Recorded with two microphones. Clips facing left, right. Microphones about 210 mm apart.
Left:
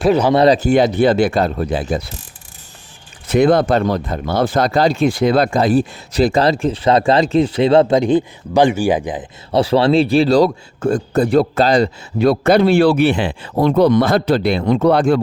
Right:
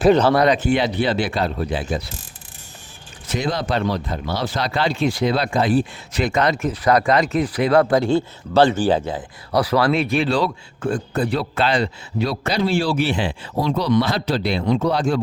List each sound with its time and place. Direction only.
0.0 s speech: 5° left (ahead or behind)
0.3 s speech: 35° left (ahead or behind)
3.2 s speech: 55° left (ahead or behind)